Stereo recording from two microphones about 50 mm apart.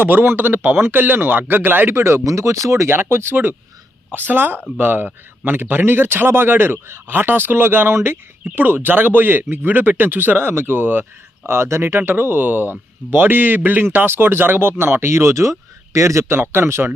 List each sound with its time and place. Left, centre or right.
0.0 s a man's voice: right
2.9 s a man's voice: right
11.4 s a man's voice: right
13.8 s speech: right
16.3 s a man's voice: right